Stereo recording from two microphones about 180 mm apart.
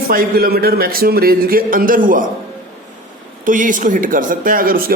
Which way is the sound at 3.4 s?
45° right (ahead or behind).